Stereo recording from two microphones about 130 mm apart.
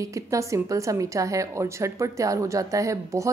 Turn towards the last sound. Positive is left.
turn(degrees=-25)  # may be behind; listen again after turning